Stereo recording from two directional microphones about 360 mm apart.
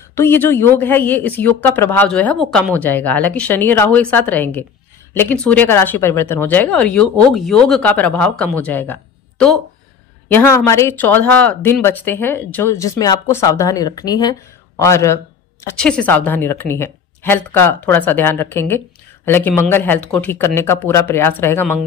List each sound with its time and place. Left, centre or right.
0.1 s speech: centre